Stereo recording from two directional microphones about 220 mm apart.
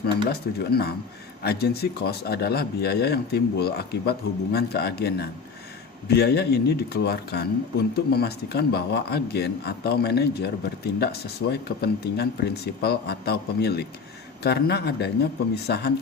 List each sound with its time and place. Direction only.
0.3 s speech: 45° left (ahead or behind)